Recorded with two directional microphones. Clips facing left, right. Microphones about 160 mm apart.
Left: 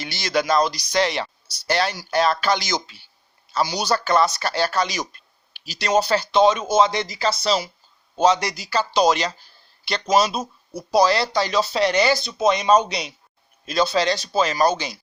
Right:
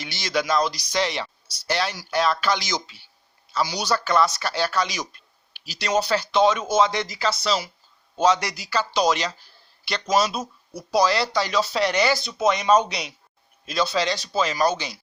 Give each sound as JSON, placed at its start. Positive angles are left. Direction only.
{"t": 0.0, "sound": "speech", "side_deg": 55}
{"t": 0.7, "sound": "speech", "side_deg": 60}
{"t": 1.6, "sound": "speech", "side_deg": 40}